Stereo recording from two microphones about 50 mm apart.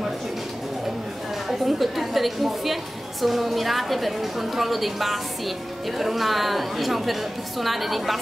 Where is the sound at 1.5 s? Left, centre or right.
Centre.